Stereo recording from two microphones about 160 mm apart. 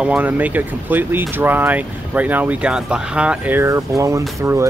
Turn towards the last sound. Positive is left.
turn(degrees=-20)  # may be behind; listen again after turning